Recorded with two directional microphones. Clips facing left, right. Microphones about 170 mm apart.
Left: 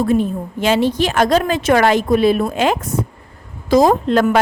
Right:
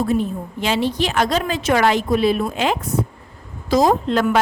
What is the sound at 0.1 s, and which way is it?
A woman's voice, 50° left (ahead or behind).